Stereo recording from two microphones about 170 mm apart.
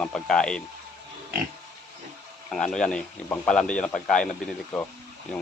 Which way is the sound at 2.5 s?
5° left (ahead or behind).